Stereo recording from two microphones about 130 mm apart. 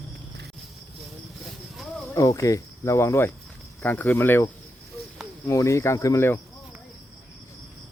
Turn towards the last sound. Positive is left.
turn(degrees=20)  # may be behind; listen again after turning